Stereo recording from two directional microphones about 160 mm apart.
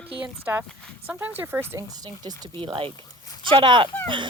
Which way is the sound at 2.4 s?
30° right (ahead or behind).